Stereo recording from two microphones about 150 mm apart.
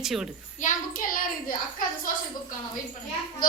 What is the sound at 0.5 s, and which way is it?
A child's voice, 60° left (ahead or behind).